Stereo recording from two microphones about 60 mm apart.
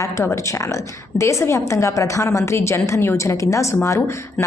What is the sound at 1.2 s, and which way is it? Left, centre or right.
Speech, left.